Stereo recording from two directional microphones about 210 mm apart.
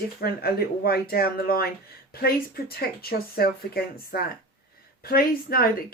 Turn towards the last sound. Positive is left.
turn(degrees=45)  # may be behind; listen again after turning